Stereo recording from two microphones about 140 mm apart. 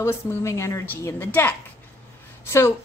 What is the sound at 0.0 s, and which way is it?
A woman's voice, 20° left (ahead or behind).